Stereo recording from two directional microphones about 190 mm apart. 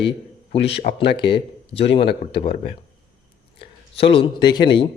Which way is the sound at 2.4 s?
50° left (ahead or behind).